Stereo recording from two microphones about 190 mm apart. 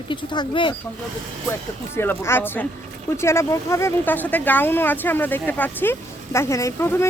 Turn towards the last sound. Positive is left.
turn(degrees=10)  # may be behind; listen again after turning